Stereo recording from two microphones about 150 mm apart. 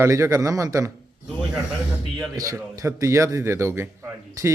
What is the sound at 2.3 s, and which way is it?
A man's voice, 20° right (ahead or behind).